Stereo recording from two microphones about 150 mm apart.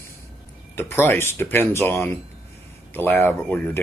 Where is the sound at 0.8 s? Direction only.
15° left (ahead or behind).